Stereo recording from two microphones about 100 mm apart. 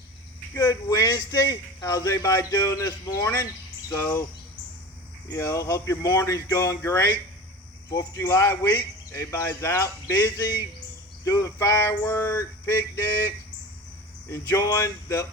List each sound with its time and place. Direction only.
0.5 s a man's voice: 35° left (ahead or behind)
5.3 s a man's voice: 30° left (ahead or behind)
14.3 s speech: 25° left (ahead or behind)